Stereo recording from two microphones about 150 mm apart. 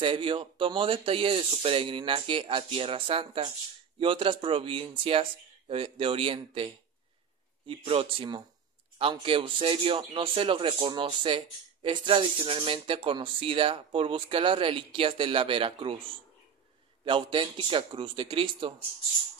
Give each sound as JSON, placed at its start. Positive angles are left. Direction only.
{"t": 0.0, "sound": "a man's voice", "side_deg": -35}
{"t": 17.0, "sound": "a man's voice", "side_deg": -35}